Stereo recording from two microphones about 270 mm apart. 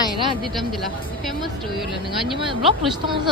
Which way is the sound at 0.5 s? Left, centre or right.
Centre.